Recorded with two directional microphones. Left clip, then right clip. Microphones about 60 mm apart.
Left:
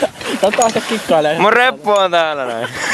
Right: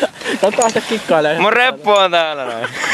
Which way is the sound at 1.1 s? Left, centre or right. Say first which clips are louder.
Left 1 dB; right.